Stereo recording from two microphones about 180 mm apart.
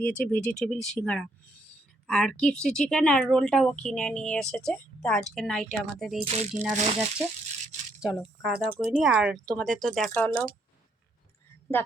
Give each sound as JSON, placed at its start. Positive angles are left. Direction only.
{"t": 0.0, "sound": "speech", "side_deg": 10}
{"t": 6.1, "sound": "speech", "side_deg": -35}
{"t": 8.0, "sound": "speech", "side_deg": -5}